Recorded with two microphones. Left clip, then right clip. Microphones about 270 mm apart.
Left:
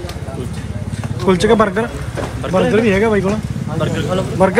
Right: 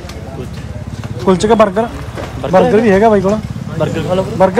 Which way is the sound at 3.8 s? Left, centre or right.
Right.